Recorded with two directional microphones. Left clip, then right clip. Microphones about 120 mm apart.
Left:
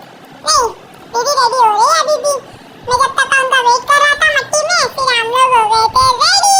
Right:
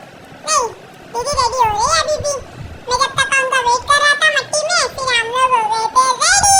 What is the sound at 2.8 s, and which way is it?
Cat, 25° left (ahead or behind).